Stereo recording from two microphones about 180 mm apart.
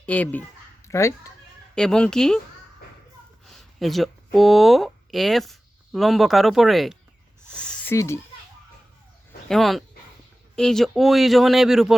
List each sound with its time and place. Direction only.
0.0 s speech: 10° left (ahead or behind)
1.7 s speech: 5° left (ahead or behind)
3.5 s speech: centre (ahead or behind)
7.5 s a sound: 5° left (ahead or behind)
7.9 s a child's voice: 15° left (ahead or behind)
9.5 s speech: centre (ahead or behind)